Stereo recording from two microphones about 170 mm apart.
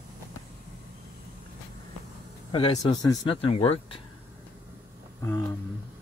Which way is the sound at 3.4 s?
35° left (ahead or behind).